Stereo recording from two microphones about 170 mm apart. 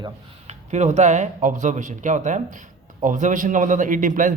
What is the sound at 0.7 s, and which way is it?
Speech, 45° right (ahead or behind).